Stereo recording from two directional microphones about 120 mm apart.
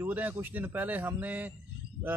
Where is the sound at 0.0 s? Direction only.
15° right (ahead or behind).